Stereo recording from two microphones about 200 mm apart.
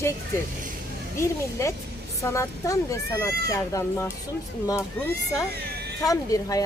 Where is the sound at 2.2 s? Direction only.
15° left (ahead or behind).